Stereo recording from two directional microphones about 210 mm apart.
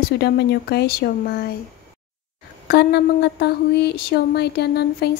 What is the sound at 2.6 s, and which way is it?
A woman's voice, 50° left (ahead or behind).